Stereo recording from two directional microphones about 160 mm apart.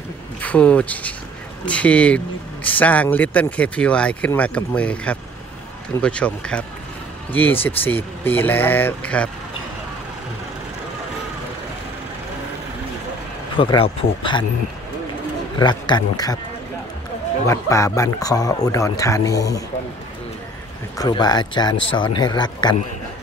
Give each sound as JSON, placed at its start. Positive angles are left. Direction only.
{"t": 0.4, "sound": "speech", "side_deg": 10}
{"t": 13.6, "sound": "speech", "side_deg": 35}
{"t": 15.6, "sound": "speech", "side_deg": 25}
{"t": 17.5, "sound": "speech", "side_deg": 20}
{"t": 21.0, "sound": "speech", "side_deg": 25}